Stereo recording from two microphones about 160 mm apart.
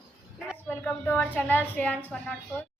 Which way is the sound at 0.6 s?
10° left (ahead or behind).